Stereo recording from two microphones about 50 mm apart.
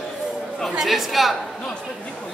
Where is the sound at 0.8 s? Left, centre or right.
Centre.